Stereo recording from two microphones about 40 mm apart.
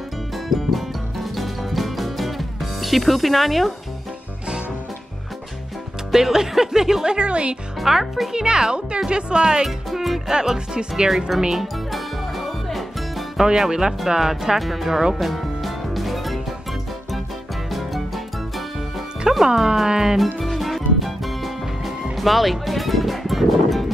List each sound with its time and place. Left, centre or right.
0.5 s music: centre
6.1 s speech: centre
7.2 s speech: right
7.8 s speech: centre
8.3 s speech: centre
9.7 s speech: centre; by 11.1 s right
11.1 s speech: centre
11.6 s music: centre
13.4 s speech: centre
15.1 s music: centre
17.6 s music: centre
19.4 s speech: centre
20.3 s music: centre